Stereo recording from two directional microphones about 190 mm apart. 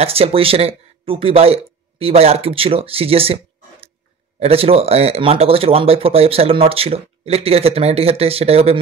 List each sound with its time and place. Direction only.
0.0 s speech: 30° right (ahead or behind)
4.4 s speech: 30° right (ahead or behind)